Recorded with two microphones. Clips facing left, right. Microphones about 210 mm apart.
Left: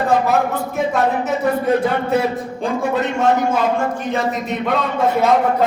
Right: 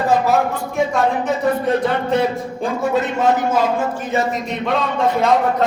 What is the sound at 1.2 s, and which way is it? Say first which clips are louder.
Speech: even; 5° left (ahead or behind).